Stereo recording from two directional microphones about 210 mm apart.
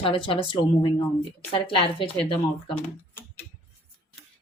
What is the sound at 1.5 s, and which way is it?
Speech, 25° left (ahead or behind).